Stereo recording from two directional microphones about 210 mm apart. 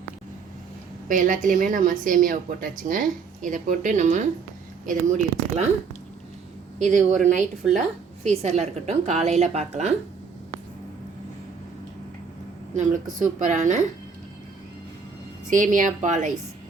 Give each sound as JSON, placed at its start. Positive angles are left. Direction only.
{"t": 1.0, "sound": "speech", "side_deg": -40}
{"t": 6.7, "sound": "speech", "side_deg": -35}
{"t": 12.7, "sound": "speech", "side_deg": -35}
{"t": 15.4, "sound": "speech", "side_deg": -40}